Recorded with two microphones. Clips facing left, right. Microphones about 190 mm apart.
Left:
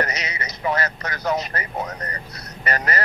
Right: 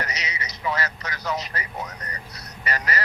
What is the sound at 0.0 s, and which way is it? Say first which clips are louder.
Speech: left 6 dB; 55° left (ahead or behind).